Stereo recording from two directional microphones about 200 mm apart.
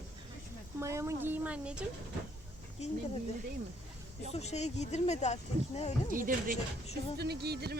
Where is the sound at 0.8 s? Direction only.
15° right (ahead or behind).